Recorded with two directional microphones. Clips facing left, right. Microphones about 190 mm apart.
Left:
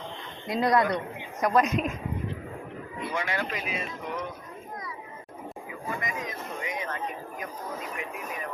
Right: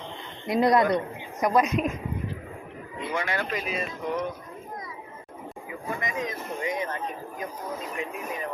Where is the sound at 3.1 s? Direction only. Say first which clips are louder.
Right 2 dB; 50° right (ahead or behind).